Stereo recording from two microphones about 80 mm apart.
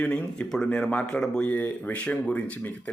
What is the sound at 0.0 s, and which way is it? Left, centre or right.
A man's voice, centre.